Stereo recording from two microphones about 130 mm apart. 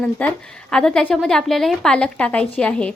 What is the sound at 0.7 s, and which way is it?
A woman's voice, 5° left (ahead or behind).